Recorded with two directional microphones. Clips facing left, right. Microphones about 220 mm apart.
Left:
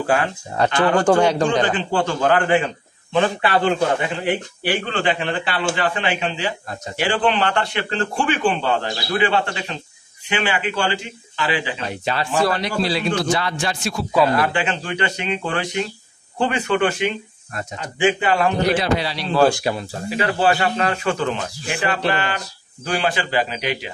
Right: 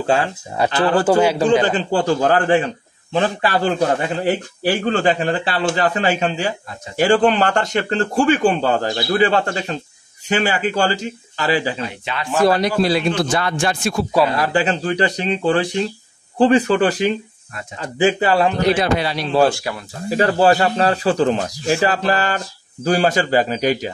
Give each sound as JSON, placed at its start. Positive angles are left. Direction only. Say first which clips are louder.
{"t": 0.0, "sound": "a man's voice", "louder": "right 2 dB", "side_deg": -25}
{"t": 1.0, "sound": "a man's voice", "louder": "right 1 dB", "side_deg": -5}
{"t": 1.6, "sound": "a man's voice", "louder": "right 2 dB", "side_deg": -40}
{"t": 12.0, "sound": "speech", "louder": "left 4 dB", "side_deg": 40}
{"t": 12.5, "sound": "a man's voice", "louder": "right 5 dB", "side_deg": -45}
{"t": 14.4, "sound": "a man's voice", "louder": "right 4 dB", "side_deg": -40}
{"t": 18.8, "sound": "a man's voice", "louder": "right 3 dB", "side_deg": -50}
{"t": 19.7, "sound": "speech", "louder": "left 4 dB", "side_deg": 25}
{"t": 20.1, "sound": "a man's voice", "louder": "right 5 dB", "side_deg": -40}